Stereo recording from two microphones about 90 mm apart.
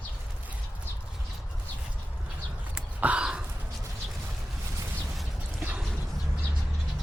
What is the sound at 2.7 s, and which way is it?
Crow, 15° right (ahead or behind).